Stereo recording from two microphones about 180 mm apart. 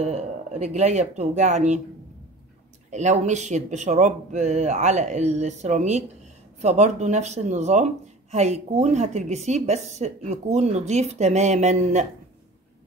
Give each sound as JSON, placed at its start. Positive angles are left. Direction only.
{"t": 0.0, "sound": "speech", "side_deg": -40}
{"t": 2.9, "sound": "a woman's voice", "side_deg": -40}